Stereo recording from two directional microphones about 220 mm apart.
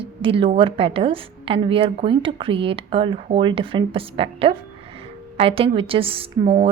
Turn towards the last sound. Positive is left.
turn(degrees=-25)  # may be behind; listen again after turning